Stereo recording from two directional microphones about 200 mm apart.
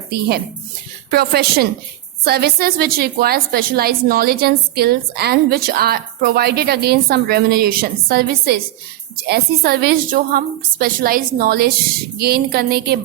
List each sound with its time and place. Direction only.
1.1 s a woman's voice: 50° right (ahead or behind)